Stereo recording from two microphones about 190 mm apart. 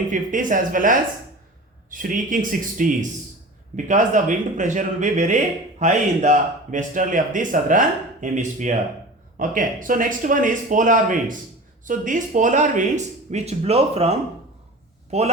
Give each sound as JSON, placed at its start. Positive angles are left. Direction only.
{"t": 0.1, "sound": "speech", "side_deg": -45}